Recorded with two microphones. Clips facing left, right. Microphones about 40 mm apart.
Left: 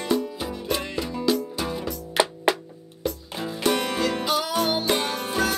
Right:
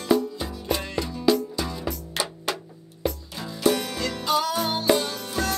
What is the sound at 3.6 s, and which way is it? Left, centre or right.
Music, left.